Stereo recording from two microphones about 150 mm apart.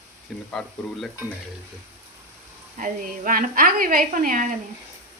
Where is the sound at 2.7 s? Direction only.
65° right (ahead or behind).